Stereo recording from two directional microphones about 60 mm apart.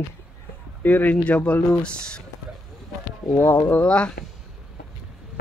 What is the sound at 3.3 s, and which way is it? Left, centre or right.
Speech, left.